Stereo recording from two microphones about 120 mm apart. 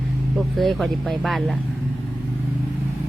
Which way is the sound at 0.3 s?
Centre (ahead or behind).